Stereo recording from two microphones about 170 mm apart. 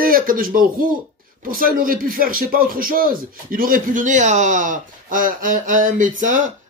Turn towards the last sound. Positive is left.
turn(degrees=-50)  # may be behind; listen again after turning